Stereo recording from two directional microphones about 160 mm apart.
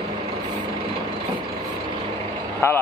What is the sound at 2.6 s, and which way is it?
Speech, 15° left (ahead or behind).